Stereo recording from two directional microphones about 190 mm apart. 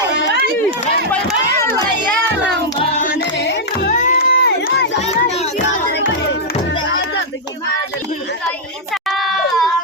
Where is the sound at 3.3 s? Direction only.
65° left (ahead or behind).